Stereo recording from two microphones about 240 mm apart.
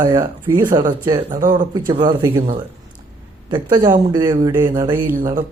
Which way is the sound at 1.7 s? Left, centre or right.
Centre.